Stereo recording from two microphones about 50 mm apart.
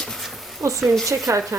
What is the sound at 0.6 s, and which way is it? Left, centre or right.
Speech, right.